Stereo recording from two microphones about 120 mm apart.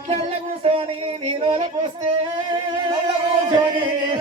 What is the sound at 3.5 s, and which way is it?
Music, 45° right (ahead or behind).